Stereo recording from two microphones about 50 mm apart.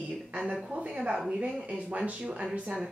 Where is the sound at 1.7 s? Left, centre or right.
Right.